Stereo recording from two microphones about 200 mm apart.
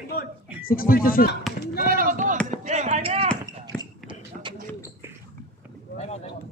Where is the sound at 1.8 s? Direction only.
45° right (ahead or behind).